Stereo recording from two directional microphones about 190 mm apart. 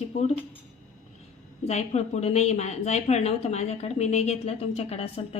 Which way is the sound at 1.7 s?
35° left (ahead or behind).